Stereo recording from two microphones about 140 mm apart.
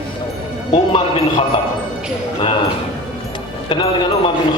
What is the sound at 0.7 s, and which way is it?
Speech, 40° left (ahead or behind).